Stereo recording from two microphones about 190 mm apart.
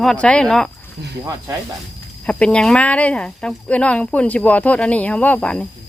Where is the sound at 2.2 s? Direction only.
5° left (ahead or behind).